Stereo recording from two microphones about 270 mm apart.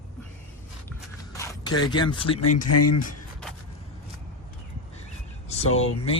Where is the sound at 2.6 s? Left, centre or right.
Left.